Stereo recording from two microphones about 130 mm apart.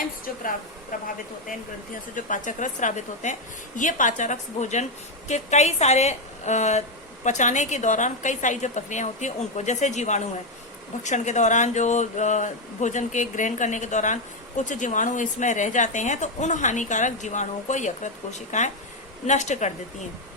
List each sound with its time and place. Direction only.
2.1 s a woman's voice: 80° left; by 20.1 s 65° left (ahead or behind)